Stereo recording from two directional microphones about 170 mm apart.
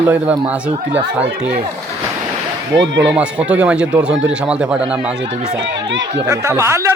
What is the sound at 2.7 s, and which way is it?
Speech, 90° right.